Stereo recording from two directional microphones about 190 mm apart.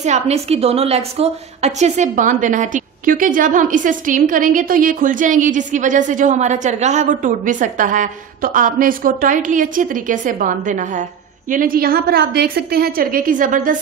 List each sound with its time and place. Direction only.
0.0 s a woman's voice: 35° right (ahead or behind)